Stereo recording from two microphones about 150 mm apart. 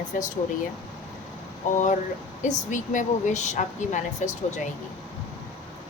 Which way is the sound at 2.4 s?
55° left (ahead or behind).